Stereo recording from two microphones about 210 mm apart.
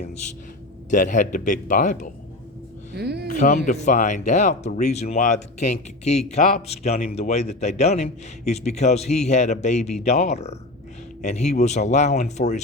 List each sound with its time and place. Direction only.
0.9 s speech: 35° left (ahead or behind)
2.9 s speech: 50° right (ahead or behind)
3.2 s speech: 40° left (ahead or behind)